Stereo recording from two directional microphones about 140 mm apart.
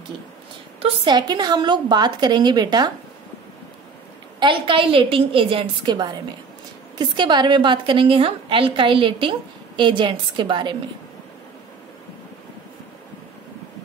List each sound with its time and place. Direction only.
0.8 s a woman's voice: 30° right (ahead or behind)
4.4 s a woman's voice: 35° right (ahead or behind)